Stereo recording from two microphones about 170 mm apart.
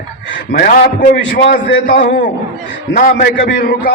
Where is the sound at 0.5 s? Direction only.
60° left (ahead or behind).